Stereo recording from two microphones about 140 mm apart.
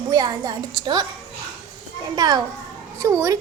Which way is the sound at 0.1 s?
30° right (ahead or behind).